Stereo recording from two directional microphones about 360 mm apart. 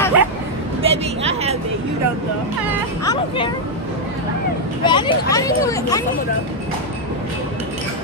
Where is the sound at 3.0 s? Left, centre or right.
Centre.